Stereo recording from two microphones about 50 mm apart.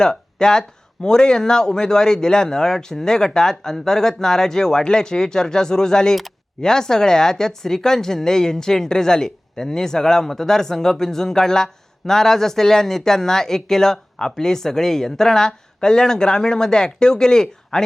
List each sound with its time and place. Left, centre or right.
0.0 s speech: centre